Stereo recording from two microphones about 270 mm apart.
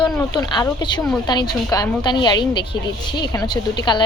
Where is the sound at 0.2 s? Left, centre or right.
Centre.